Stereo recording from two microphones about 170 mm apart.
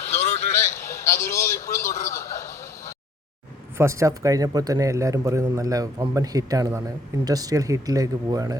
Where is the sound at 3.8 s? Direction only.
15° right (ahead or behind).